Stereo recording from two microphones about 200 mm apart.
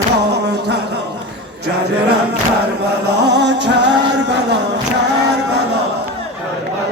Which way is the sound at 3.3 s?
60° right (ahead or behind).